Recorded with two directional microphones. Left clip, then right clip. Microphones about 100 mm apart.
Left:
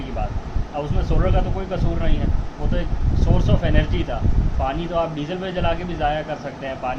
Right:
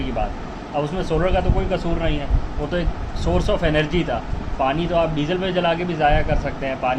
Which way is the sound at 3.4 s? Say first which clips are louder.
Right 5 dB; 35° right (ahead or behind).